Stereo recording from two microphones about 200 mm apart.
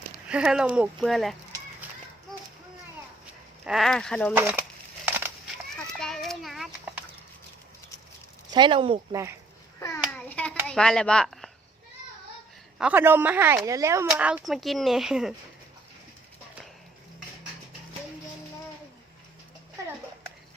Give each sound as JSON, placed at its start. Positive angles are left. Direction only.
{"t": 0.3, "sound": "speech", "side_deg": -5}
{"t": 3.7, "sound": "speech", "side_deg": 0}
{"t": 4.4, "sound": "speech", "side_deg": -10}
{"t": 5.0, "sound": "a sound", "side_deg": -10}
{"t": 5.7, "sound": "children playing", "side_deg": 5}
{"t": 8.5, "sound": "speech", "side_deg": -25}
{"t": 10.1, "sound": "hands", "side_deg": 5}
{"t": 10.7, "sound": "speech", "side_deg": 5}
{"t": 12.8, "sound": "speech", "side_deg": -10}